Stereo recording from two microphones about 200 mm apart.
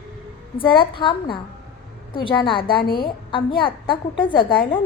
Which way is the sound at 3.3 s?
25° left (ahead or behind).